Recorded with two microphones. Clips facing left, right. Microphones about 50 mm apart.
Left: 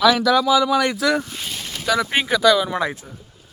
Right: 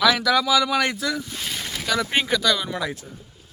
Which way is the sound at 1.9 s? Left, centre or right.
Centre.